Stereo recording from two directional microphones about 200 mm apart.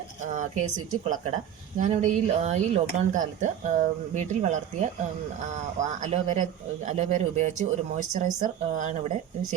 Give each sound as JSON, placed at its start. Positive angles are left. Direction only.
{"t": 1.8, "sound": "speech", "side_deg": -40}